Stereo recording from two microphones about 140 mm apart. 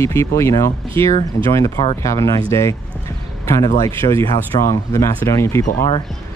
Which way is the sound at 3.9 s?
20° left (ahead or behind).